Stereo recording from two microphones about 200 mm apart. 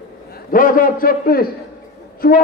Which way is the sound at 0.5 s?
45° left (ahead or behind).